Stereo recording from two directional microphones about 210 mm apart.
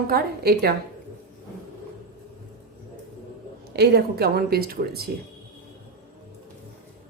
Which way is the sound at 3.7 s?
50° right (ahead or behind).